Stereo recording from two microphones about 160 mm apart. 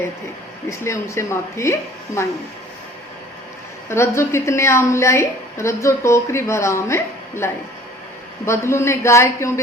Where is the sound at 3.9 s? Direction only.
15° left (ahead or behind).